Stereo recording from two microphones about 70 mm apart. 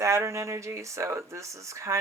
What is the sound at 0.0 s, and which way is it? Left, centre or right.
Speech, right.